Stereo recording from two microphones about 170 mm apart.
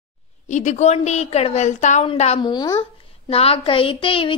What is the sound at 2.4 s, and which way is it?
A child's voice, 25° left (ahead or behind).